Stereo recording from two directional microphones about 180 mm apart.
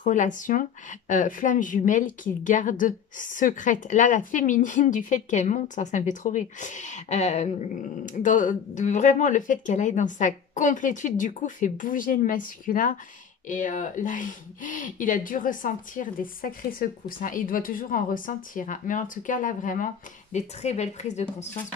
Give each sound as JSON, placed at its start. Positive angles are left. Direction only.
{"t": 0.0, "sound": "a woman's voice", "side_deg": 45}